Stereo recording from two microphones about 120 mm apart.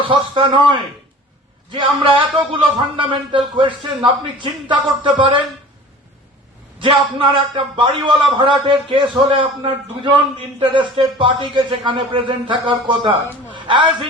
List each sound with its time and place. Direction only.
0.0 s a man's voice: 45° right (ahead or behind)
6.7 s a man's voice: 45° right (ahead or behind)
10.6 s a man's voice: 45° right (ahead or behind)